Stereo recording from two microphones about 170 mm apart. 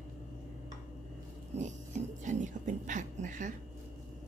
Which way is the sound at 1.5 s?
45° right (ahead or behind).